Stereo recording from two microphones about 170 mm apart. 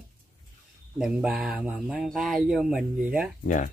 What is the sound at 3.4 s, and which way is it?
Speech, 50° left (ahead or behind).